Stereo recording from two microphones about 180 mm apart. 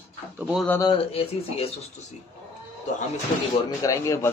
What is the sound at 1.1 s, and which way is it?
Speech, 30° left (ahead or behind).